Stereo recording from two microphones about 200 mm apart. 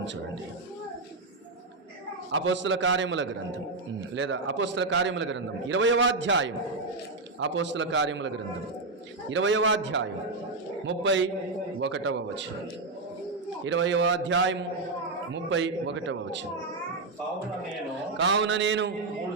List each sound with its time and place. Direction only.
2.3 s a man's voice: 70° right (ahead or behind)
9.3 s a man's voice: 70° right (ahead or behind)
13.7 s a man's voice: 70° right (ahead or behind)
18.2 s a man's voice: 65° right (ahead or behind)